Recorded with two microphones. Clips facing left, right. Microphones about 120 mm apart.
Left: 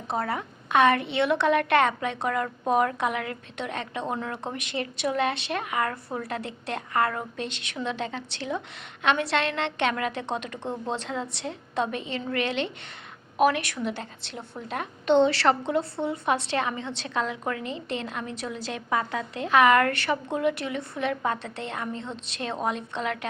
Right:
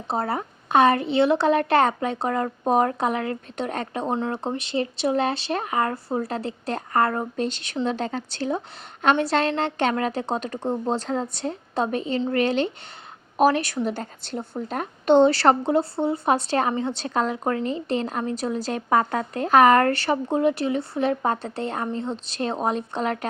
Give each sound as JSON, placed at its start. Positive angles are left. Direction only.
{"t": 0.1, "sound": "a woman's voice", "side_deg": -35}
{"t": 4.1, "sound": "a woman's voice", "side_deg": -30}